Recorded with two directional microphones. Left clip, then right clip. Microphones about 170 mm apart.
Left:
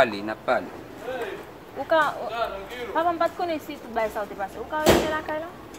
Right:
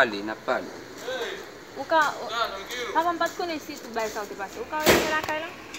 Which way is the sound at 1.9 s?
25° left (ahead or behind).